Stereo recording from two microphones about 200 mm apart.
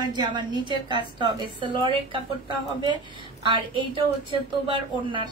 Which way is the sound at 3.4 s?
25° right (ahead or behind).